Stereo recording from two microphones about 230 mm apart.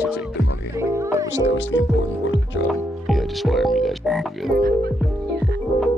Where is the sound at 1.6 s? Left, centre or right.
Left.